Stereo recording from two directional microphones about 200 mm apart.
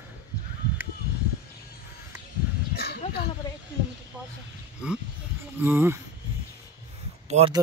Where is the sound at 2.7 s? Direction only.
50° left (ahead or behind).